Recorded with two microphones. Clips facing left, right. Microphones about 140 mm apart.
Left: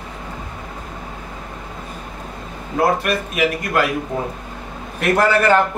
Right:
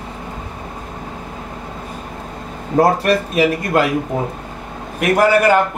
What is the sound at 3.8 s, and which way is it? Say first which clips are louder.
Speech: right 2 dB; 25° right (ahead or behind).